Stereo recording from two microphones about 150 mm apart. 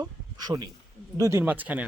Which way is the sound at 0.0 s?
25° right (ahead or behind).